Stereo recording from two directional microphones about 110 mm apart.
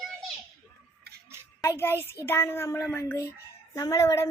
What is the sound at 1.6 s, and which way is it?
A woman's voice, 20° left (ahead or behind).